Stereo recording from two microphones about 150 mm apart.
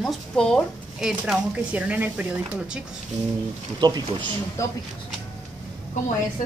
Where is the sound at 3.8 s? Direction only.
25° right (ahead or behind).